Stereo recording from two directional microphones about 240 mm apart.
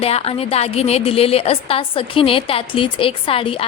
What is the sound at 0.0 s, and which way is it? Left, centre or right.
A woman's voice, left.